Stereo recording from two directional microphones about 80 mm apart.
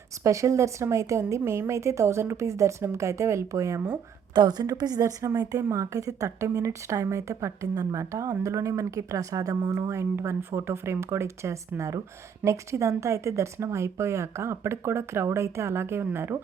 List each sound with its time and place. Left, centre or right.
0.2 s a woman's voice: right
4.4 s a woman's voice: right